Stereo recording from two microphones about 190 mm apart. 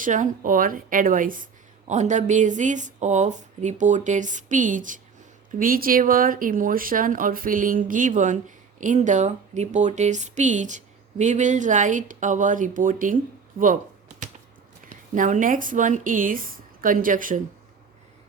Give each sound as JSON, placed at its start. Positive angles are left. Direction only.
{"t": 0.0, "sound": "speech", "side_deg": -45}
{"t": 14.8, "sound": "speech", "side_deg": -40}